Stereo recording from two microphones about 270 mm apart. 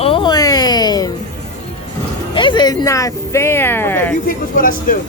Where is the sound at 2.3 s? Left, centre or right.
Centre.